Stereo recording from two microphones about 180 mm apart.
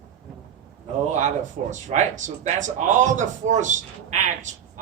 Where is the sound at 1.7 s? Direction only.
40° right (ahead or behind).